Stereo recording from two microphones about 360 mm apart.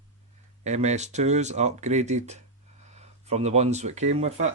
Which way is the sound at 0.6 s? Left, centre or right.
Centre.